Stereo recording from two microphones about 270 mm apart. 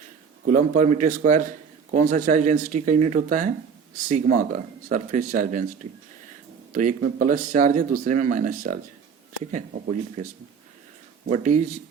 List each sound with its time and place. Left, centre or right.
0.4 s a man's voice: right
11.3 s a man's voice: right